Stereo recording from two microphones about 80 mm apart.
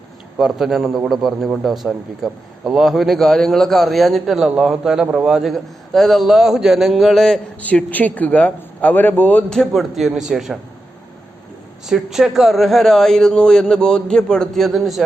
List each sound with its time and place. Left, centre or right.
0.3 s a man's voice: centre
7.6 s speech: centre
9.5 s a man's voice: centre
11.9 s a man's voice: centre